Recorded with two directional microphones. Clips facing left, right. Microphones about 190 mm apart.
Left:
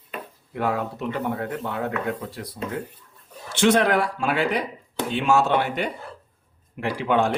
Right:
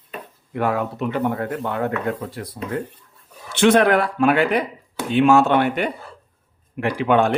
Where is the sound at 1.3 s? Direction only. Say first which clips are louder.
Right 4 dB; 50° right (ahead or behind).